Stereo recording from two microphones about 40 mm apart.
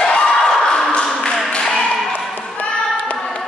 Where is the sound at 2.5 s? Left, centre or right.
Left.